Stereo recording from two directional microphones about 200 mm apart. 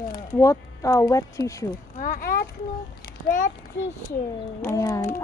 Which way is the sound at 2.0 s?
45° left (ahead or behind).